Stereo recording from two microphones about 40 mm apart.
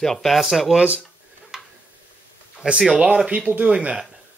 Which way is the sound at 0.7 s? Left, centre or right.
Right.